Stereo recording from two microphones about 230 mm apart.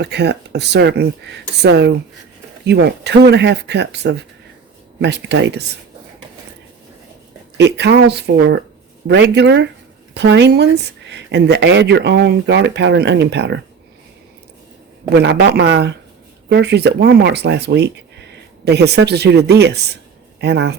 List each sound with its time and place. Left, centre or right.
0.0 s speech: right
7.6 s speech: right
15.1 s speech: right